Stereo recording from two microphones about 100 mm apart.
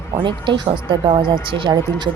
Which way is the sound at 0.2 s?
50° right (ahead or behind).